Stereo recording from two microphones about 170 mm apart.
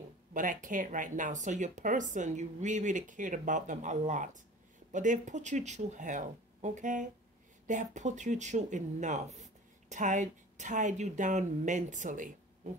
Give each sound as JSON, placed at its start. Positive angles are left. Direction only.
{"t": 0.3, "sound": "speech", "side_deg": -50}